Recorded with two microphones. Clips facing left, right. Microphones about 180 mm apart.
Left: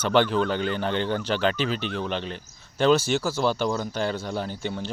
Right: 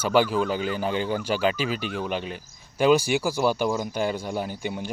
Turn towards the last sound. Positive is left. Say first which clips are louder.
# even
turn(degrees=-10)  # may be behind; listen again after turning